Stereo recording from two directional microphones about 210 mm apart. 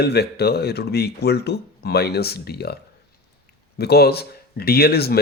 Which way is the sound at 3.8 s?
50° left (ahead or behind).